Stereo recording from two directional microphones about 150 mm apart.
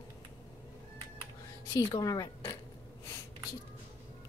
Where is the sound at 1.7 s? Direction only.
25° left (ahead or behind).